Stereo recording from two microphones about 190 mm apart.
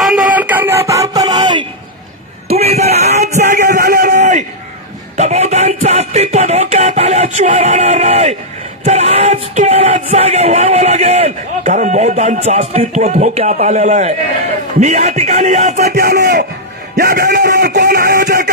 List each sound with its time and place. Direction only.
0.3 s a sound: 10° right (ahead or behind)
2.4 s music: 35° right (ahead or behind)
3.6 s a sound: 55° right (ahead or behind)
5.1 s music: 35° right (ahead or behind)
13.6 s speech: 35° right (ahead or behind)
15.8 s speech: 55° right (ahead or behind)
16.9 s music: 55° right (ahead or behind)